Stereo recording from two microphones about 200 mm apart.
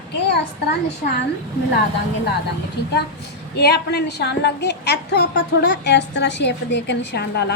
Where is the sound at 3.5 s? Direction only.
55° left (ahead or behind).